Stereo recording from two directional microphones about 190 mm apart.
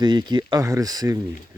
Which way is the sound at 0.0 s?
25° right (ahead or behind).